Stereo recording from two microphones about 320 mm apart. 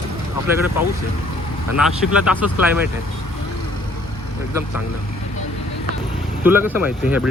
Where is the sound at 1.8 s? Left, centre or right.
Centre.